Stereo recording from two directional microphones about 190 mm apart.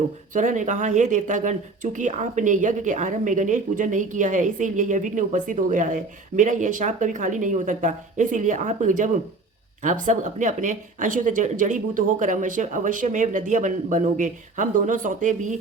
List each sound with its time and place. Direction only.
0.3 s speech: 40° right (ahead or behind)